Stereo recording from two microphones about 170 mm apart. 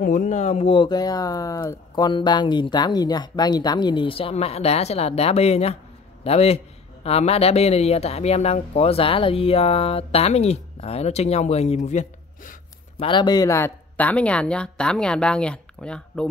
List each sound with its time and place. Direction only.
0.0 s a man's voice: 50° left (ahead or behind)
13.0 s speech: 25° left (ahead or behind); by 16.3 s 5° left (ahead or behind)